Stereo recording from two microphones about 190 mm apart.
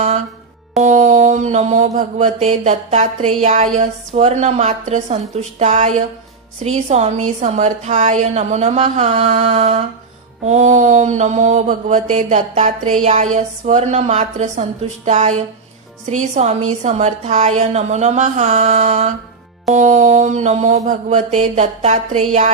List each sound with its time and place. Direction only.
0.8 s mantra: 40° right (ahead or behind)